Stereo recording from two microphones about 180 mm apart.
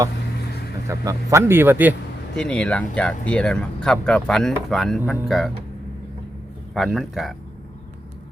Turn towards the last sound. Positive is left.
turn(degrees=0)  # may be behind; listen again after turning